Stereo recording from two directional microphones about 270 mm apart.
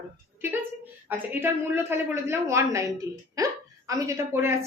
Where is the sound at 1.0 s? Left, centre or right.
Centre.